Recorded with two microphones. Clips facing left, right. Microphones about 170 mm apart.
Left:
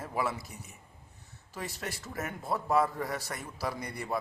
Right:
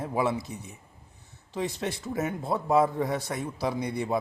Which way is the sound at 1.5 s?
20° right (ahead or behind).